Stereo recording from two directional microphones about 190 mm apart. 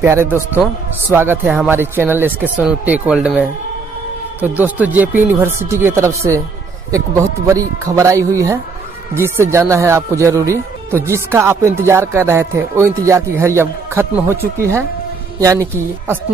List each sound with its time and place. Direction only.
0.0 s speech: 15° right (ahead or behind)